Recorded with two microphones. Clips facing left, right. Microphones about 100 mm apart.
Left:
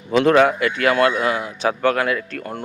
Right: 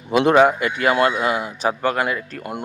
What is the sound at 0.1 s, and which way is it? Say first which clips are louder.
A man's voice: even; 10° right (ahead or behind).